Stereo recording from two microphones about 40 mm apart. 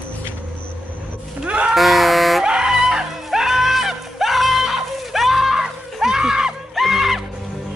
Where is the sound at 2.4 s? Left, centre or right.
Centre.